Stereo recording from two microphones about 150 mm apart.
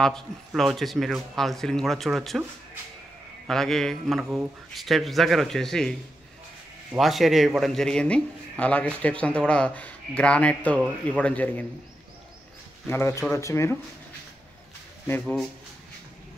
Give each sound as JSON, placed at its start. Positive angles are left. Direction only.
{"t": 0.6, "sound": "a man's voice", "side_deg": 0}
{"t": 3.4, "sound": "a man's voice", "side_deg": 0}
{"t": 7.0, "sound": "a man's voice", "side_deg": 0}
{"t": 12.8, "sound": "speech", "side_deg": 20}
{"t": 15.0, "sound": "speech", "side_deg": 10}